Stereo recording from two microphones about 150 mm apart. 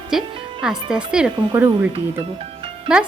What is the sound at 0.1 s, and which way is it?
Speech, 5° right (ahead or behind).